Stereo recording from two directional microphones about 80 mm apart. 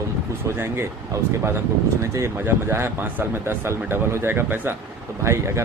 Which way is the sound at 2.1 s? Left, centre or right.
Right.